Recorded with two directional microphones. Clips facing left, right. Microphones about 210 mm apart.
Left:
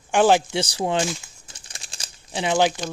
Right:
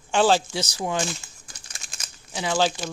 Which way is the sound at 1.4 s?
30° left (ahead or behind).